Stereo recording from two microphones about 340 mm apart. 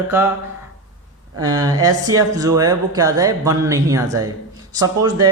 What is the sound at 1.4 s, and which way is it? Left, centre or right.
Speech, right.